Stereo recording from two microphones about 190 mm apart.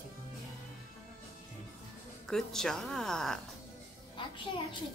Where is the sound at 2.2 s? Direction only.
Centre (ahead or behind).